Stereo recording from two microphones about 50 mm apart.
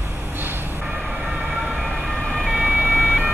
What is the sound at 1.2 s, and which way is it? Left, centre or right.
Emergency vehicle, centre.